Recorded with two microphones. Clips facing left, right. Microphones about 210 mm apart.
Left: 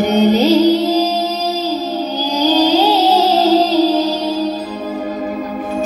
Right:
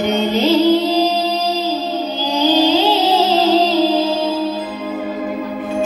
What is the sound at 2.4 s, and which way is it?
Music, 40° left (ahead or behind).